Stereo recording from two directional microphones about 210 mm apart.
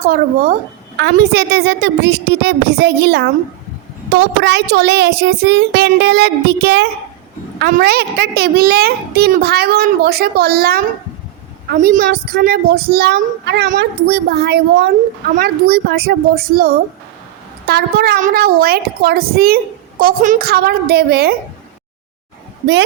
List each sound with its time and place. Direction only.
0.0 s a child's voice: 45° right (ahead or behind)
4.4 s a child's voice: 55° right (ahead or behind)